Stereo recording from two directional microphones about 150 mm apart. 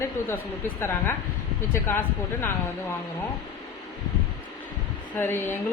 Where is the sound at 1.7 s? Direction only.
15° left (ahead or behind).